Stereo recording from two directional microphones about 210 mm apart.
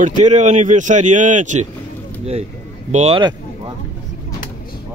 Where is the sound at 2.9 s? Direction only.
30° right (ahead or behind).